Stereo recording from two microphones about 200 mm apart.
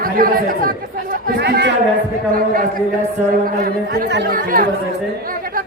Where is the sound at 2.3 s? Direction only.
45° right (ahead or behind).